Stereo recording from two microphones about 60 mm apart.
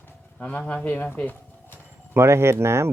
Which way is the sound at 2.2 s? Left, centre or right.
Right.